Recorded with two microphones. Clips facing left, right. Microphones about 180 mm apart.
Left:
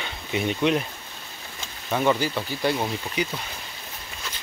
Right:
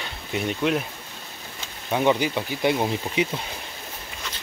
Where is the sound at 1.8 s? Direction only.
15° right (ahead or behind).